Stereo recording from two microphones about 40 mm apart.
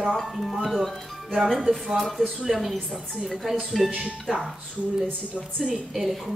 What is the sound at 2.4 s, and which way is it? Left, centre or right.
A woman's voice, centre.